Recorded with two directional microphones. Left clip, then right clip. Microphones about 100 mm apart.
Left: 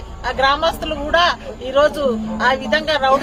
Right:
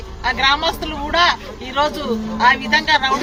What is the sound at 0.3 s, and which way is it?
Speech, 35° left (ahead or behind).